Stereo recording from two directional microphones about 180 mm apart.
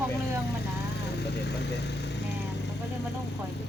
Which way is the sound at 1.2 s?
70° left (ahead or behind).